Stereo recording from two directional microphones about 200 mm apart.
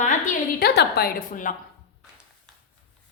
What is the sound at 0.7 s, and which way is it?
Speech, 55° left (ahead or behind).